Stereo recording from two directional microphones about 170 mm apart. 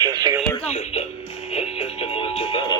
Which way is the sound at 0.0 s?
25° right (ahead or behind).